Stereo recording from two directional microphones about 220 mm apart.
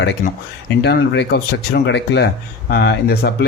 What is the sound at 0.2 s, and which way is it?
Speech, 35° left (ahead or behind).